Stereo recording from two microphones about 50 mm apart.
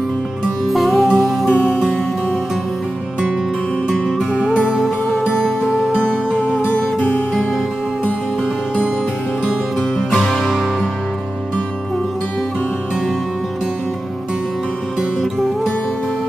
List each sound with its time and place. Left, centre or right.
0.7 s music: centre
4.6 s music: centre
5.9 s music: centre
6.6 s music: left
9.4 s music: centre